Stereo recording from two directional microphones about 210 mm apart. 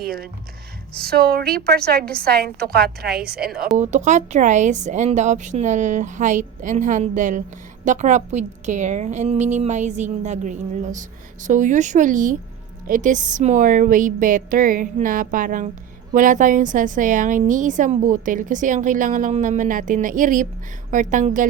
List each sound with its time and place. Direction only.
0.0 s a woman's voice: 45° right (ahead or behind)
3.8 s a woman's voice: 35° right (ahead or behind)